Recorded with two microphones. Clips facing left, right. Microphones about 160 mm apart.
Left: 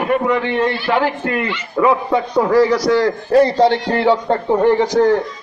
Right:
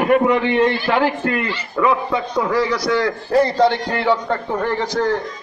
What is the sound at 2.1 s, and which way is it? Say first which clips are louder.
A man's voice: left 5 dB; 35° left (ahead or behind).